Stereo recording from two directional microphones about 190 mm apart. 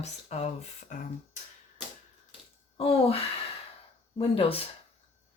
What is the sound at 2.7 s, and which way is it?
Speech, 30° left (ahead or behind).